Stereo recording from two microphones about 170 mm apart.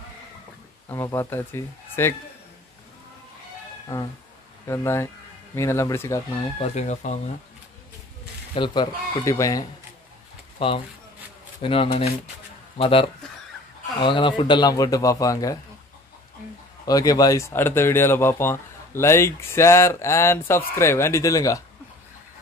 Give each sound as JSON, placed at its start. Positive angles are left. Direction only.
{"t": 0.8, "sound": "speech", "side_deg": 15}
{"t": 3.9, "sound": "speech", "side_deg": 15}
{"t": 6.6, "sound": "speech", "side_deg": 40}
{"t": 8.5, "sound": "speech", "side_deg": 25}
{"t": 10.6, "sound": "speech", "side_deg": 35}
{"t": 16.8, "sound": "speech", "side_deg": 20}